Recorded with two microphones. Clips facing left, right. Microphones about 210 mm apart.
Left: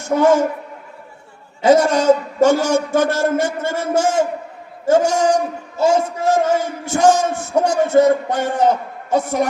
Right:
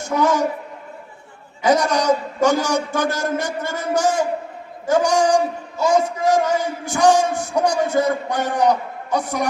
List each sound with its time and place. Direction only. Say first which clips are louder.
0.2 s a man's voice: left 5 dB; 25° left (ahead or behind)
1.6 s a man's voice: left 5 dB; 25° left (ahead or behind)